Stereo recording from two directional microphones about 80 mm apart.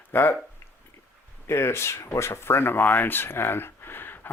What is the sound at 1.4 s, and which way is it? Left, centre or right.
Speech, left.